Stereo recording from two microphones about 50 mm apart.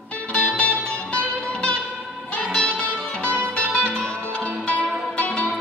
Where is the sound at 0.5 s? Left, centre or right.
Left.